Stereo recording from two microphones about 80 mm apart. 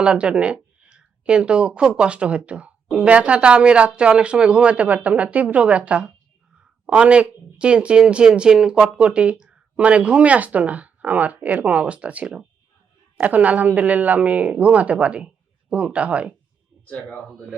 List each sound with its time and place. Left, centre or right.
0.0 s speech: centre
16.9 s speech: centre